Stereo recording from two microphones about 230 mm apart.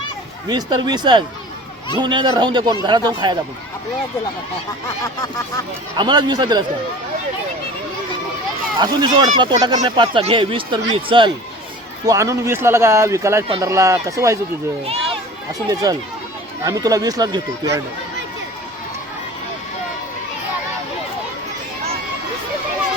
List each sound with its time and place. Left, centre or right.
0.4 s speech: centre
6.0 s speech: centre
8.8 s speech: centre
14.8 s a sound: right
15.7 s speech: centre